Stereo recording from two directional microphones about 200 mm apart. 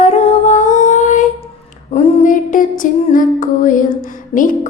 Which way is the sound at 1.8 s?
35° left (ahead or behind).